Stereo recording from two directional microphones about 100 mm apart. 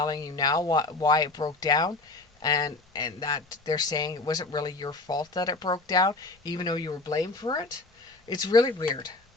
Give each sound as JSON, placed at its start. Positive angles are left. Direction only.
{"t": 0.0, "sound": "speech", "side_deg": 40}